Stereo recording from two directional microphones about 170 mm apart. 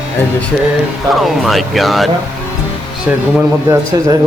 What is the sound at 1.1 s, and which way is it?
Speech, centre (ahead or behind).